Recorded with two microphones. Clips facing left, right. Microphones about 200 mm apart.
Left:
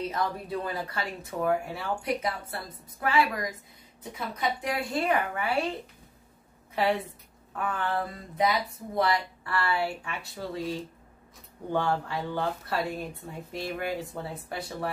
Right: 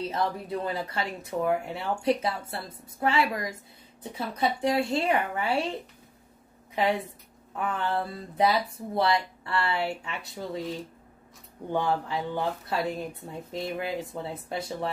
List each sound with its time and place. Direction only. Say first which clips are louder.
0.0 s speech: right 1 dB; 25° right (ahead or behind)
6.7 s a woman's voice: even; 15° right (ahead or behind)
11.7 s speech: right 1 dB; 20° right (ahead or behind)